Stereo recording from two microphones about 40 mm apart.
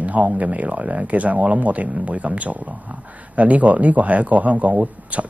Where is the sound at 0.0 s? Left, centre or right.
Right.